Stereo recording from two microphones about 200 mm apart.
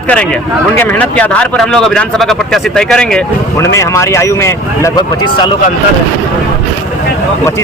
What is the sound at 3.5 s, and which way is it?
Speech, 15° left (ahead or behind).